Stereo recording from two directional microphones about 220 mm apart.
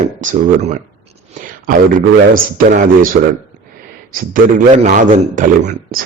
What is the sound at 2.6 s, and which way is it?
Speech, 40° right (ahead or behind).